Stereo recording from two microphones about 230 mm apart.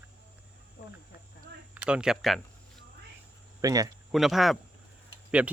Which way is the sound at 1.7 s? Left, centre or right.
Centre.